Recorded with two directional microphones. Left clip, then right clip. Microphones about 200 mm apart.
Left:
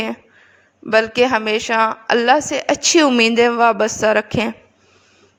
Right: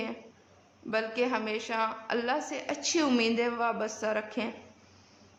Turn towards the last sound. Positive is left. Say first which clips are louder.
# left 16 dB
turn(degrees=45)  # may be behind; listen again after turning